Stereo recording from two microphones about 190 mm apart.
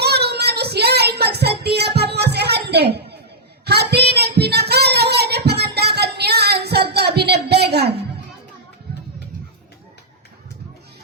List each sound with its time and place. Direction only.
0.0 s child singing: 60° right (ahead or behind)